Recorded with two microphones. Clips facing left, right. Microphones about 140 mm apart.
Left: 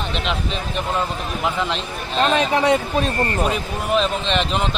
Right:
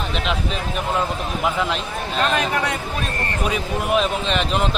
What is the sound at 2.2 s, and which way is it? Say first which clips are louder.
Speech: left 4 dB; 35° left (ahead or behind).